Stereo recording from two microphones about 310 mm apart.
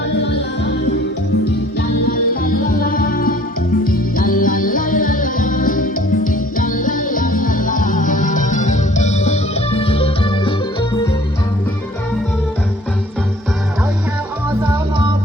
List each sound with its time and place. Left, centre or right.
0.2 s music: left
2.0 s music: left
14.6 s music: centre